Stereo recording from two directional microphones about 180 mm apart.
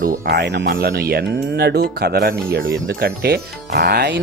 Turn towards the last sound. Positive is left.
turn(degrees=-70)  # may be behind; listen again after turning